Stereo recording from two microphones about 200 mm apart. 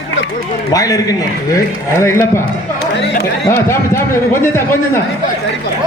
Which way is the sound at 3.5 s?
10° left (ahead or behind).